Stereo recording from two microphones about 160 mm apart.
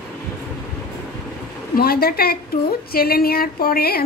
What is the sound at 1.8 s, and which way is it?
A woman's voice, 70° left (ahead or behind).